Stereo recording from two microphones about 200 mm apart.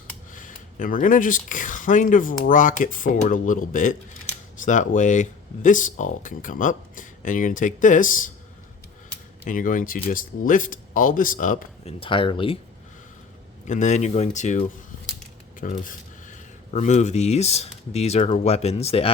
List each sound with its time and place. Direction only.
0.3 s speech: 40° left (ahead or behind)
9.4 s speech: 40° left (ahead or behind)
11.9 s speech: 25° left (ahead or behind)
13.7 s speech: 35° left (ahead or behind)
15.6 s speech: 40° left (ahead or behind)